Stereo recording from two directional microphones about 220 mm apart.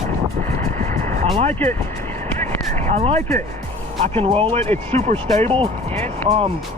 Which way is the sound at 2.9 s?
30° right (ahead or behind).